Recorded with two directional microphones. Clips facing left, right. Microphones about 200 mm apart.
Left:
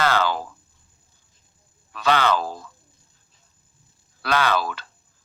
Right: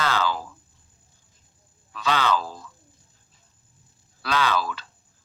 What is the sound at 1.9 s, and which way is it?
Speech, 60° left (ahead or behind).